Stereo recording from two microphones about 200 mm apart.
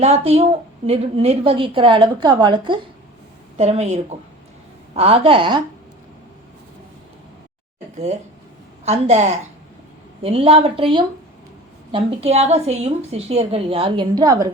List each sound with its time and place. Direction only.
0.0 s a woman's voice: 30° right (ahead or behind)
3.6 s a woman's voice: 35° right (ahead or behind)
7.9 s a woman's voice: 35° right (ahead or behind)